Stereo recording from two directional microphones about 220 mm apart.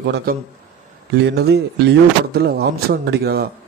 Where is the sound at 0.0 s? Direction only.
45° right (ahead or behind).